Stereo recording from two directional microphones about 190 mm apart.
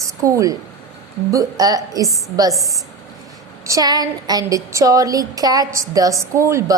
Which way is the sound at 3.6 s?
20° right (ahead or behind).